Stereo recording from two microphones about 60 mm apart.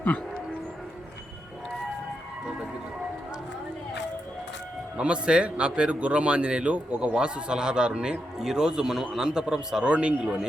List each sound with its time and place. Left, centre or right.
4.9 s a man's voice: centre